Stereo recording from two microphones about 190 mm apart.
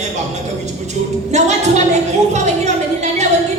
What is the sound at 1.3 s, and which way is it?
A woman's voice, 35° right (ahead or behind).